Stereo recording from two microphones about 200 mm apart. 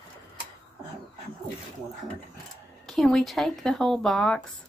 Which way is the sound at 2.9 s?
Centre (ahead or behind).